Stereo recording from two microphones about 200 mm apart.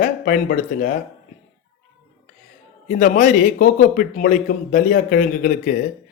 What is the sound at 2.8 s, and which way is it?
Speech, 40° left (ahead or behind).